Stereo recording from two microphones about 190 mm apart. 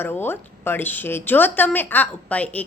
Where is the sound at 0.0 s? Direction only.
10° left (ahead or behind).